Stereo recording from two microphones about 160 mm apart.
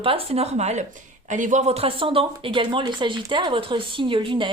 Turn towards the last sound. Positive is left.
turn(degrees=-30)  # may be behind; listen again after turning